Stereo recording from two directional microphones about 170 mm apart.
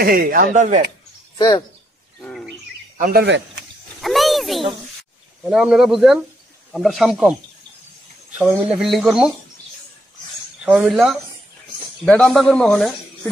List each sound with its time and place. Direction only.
0.0 s speech: 60° right (ahead or behind)
3.0 s speech: 60° right (ahead or behind); by 3.4 s 75° right (ahead or behind)
4.0 s a child's voice: centre (ahead or behind)
10.6 s speech: 5° right (ahead or behind)